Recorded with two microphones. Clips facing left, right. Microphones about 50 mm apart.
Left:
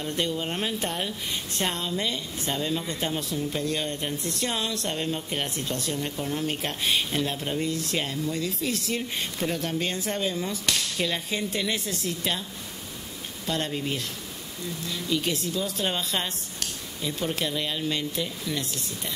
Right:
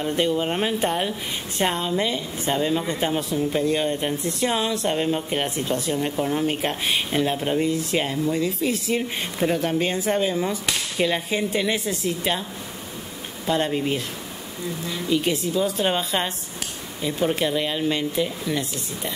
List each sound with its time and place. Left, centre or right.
0.0 s a woman's voice: centre
13.5 s a woman's voice: centre